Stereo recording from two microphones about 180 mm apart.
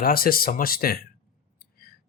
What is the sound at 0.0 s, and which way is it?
Speech, 55° left (ahead or behind).